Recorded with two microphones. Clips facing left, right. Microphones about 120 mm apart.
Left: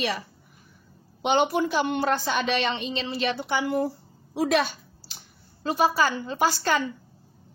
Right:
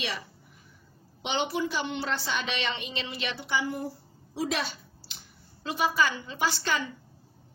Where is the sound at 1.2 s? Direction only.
50° left (ahead or behind).